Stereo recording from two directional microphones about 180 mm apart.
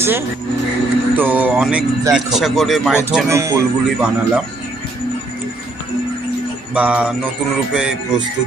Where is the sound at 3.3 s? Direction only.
15° right (ahead or behind).